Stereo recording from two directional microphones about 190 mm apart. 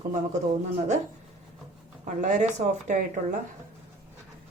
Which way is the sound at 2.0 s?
40° right (ahead or behind).